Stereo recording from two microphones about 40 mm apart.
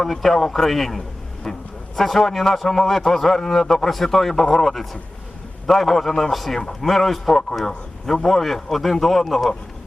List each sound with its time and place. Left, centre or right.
0.0 s a man's voice: centre
6.6 s a man's voice: centre
6.9 s a man's voice: centre